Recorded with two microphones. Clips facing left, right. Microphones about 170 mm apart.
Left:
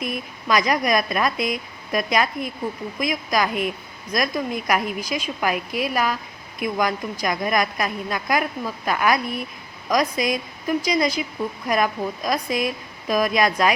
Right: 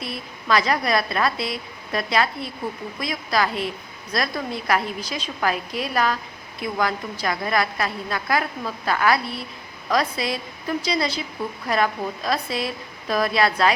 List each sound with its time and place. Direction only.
0.0 s a woman's voice: 15° left (ahead or behind)